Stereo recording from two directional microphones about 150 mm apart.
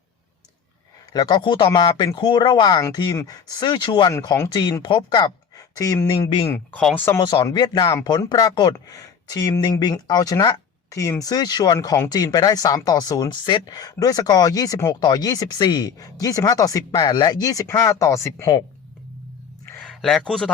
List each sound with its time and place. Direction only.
1.1 s speech: 30° left (ahead or behind)
6.5 s speech: 10° left (ahead or behind)
7.2 s speech: 30° left (ahead or behind)
19.9 s speech: centre (ahead or behind)